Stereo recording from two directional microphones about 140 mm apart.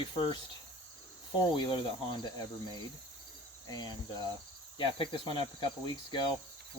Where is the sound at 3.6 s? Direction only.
30° left (ahead or behind).